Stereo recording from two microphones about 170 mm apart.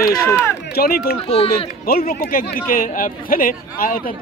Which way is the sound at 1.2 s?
35° left (ahead or behind).